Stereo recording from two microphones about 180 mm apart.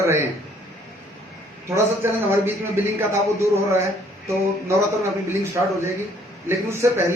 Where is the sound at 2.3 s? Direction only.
15° right (ahead or behind).